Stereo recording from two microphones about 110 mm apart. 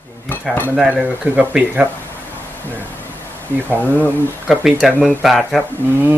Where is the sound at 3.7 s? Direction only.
15° left (ahead or behind).